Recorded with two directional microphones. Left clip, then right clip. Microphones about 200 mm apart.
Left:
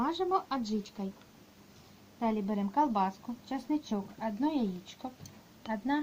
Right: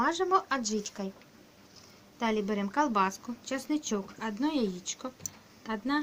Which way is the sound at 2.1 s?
20° left (ahead or behind).